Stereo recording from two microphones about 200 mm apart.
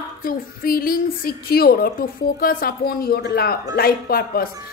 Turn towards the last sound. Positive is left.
turn(degrees=50)  # may be behind; listen again after turning